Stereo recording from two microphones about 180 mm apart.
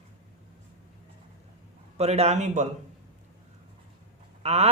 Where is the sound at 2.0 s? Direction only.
35° right (ahead or behind).